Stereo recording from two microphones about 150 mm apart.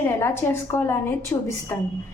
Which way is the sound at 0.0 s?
15° left (ahead or behind).